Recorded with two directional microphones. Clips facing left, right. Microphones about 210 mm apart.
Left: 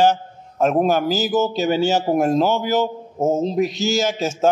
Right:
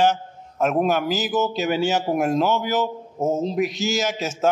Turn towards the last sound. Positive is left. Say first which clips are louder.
# left 4 dB
turn(degrees=30)  # may be behind; listen again after turning